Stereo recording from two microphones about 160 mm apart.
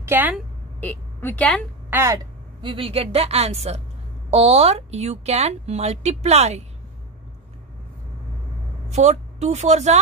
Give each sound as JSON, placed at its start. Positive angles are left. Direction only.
{"t": 0.0, "sound": "a woman's voice", "side_deg": -10}
{"t": 0.7, "sound": "a woman's voice", "side_deg": 10}
{"t": 1.9, "sound": "speech", "side_deg": -15}
{"t": 2.6, "sound": "a woman's voice", "side_deg": -35}
{"t": 8.9, "sound": "a woman's voice", "side_deg": -45}